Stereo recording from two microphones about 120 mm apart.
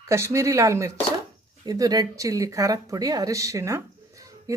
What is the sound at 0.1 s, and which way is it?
Speech, 25° right (ahead or behind).